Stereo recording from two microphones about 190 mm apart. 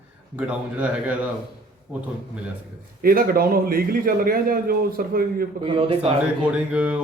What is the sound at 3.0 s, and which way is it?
A man's voice, 50° right (ahead or behind).